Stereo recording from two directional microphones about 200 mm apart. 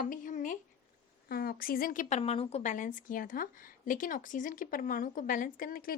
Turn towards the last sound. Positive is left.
turn(degrees=45)  # may be behind; listen again after turning